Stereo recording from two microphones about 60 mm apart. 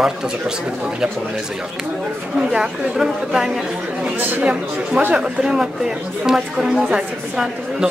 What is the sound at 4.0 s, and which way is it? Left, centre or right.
Speech, right.